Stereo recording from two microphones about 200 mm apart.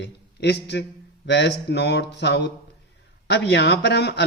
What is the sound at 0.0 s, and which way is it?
A man's voice, 60° left (ahead or behind).